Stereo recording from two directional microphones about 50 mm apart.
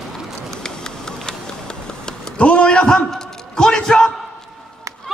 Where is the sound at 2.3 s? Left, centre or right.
Left.